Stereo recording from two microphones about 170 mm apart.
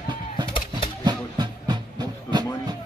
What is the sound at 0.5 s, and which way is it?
Bird, 30° left (ahead or behind).